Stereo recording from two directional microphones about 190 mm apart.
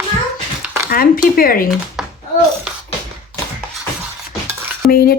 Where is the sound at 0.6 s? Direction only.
10° right (ahead or behind).